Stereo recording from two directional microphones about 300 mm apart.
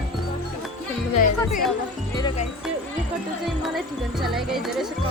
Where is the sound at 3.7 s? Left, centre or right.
Centre.